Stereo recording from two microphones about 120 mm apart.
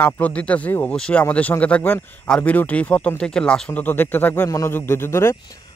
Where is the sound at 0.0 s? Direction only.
10° left (ahead or behind).